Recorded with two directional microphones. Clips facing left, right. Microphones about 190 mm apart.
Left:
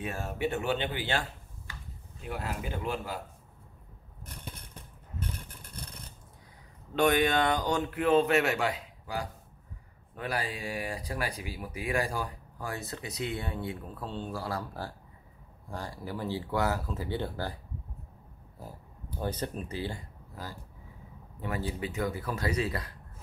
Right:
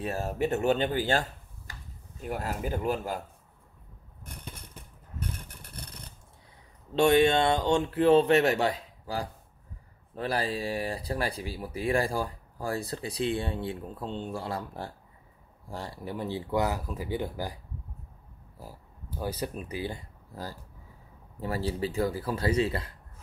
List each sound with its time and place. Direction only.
0.0 s speech: 40° right (ahead or behind)
2.2 s speech: 45° right (ahead or behind)
6.9 s speech: 25° right (ahead or behind)
19.2 s speech: 10° right (ahead or behind)
21.4 s speech: 35° right (ahead or behind)